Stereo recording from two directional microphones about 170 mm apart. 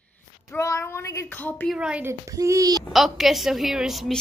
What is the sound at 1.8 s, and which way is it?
A child's voice, 10° right (ahead or behind).